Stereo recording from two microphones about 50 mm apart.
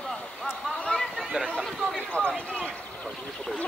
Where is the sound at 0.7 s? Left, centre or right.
Centre.